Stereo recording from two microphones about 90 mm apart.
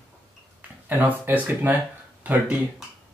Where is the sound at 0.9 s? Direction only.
20° right (ahead or behind).